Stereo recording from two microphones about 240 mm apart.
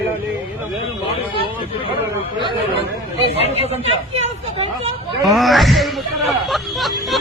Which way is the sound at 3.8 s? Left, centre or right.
Right.